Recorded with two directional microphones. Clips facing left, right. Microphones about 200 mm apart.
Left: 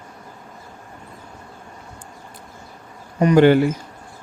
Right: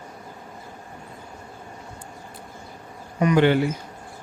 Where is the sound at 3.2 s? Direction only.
40° left (ahead or behind).